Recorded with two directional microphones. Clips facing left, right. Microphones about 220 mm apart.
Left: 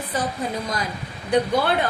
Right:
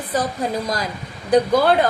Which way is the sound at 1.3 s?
40° right (ahead or behind).